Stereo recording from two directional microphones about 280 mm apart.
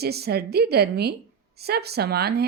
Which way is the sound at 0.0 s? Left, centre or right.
Right.